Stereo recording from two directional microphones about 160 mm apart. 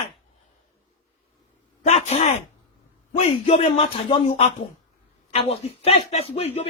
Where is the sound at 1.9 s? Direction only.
45° left (ahead or behind).